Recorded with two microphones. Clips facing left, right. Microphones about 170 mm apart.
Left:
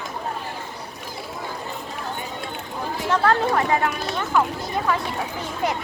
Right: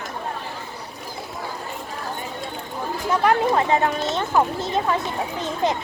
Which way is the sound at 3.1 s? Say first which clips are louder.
Right 1 dB; 15° right (ahead or behind).